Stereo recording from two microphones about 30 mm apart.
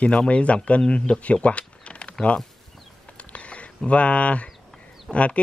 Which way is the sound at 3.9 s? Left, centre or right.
Left.